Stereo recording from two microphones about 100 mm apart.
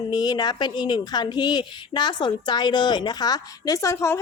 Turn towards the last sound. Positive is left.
turn(degrees=30)  # may be behind; listen again after turning